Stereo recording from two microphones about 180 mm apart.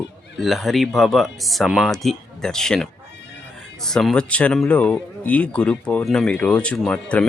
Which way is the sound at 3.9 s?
5° left (ahead or behind).